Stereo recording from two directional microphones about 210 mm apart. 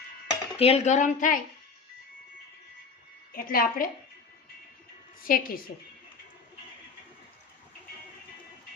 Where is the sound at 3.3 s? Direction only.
45° left (ahead or behind).